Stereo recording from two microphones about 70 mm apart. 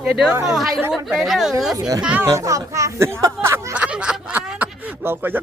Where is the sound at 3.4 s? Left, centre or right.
Right.